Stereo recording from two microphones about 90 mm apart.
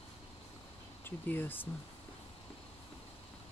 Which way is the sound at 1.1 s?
25° left (ahead or behind).